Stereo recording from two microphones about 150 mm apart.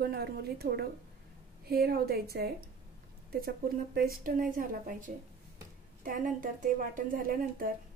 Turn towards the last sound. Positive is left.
turn(degrees=-75)  # may be behind; listen again after turning